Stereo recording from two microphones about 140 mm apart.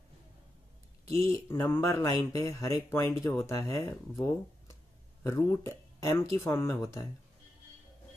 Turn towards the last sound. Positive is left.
turn(degrees=15)  # may be behind; listen again after turning